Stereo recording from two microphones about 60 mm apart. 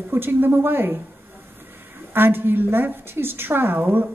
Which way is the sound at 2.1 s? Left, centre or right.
Right.